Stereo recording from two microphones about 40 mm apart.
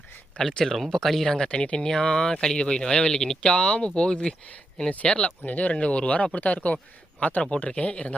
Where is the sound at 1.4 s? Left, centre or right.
Left.